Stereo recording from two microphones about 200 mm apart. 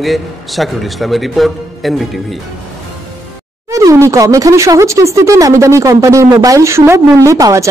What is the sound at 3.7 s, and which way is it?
Speech, 15° right (ahead or behind).